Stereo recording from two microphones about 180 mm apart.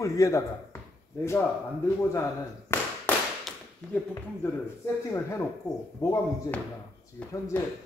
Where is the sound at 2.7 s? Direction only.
15° left (ahead or behind).